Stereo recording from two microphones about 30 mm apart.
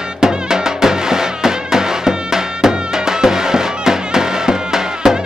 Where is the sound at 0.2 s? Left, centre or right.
Right.